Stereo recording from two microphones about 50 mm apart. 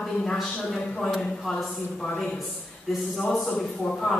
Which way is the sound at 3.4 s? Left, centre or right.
Centre.